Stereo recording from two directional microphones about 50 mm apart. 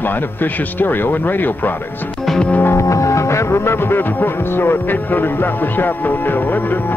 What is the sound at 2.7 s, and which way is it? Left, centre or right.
Music, left.